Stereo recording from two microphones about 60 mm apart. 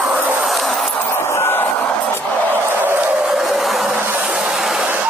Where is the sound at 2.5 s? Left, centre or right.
Right.